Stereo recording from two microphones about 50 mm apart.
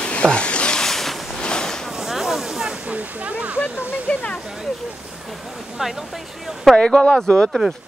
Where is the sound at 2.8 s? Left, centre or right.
Right.